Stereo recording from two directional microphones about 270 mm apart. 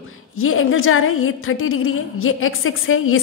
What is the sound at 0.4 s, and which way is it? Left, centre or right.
A woman's voice, left.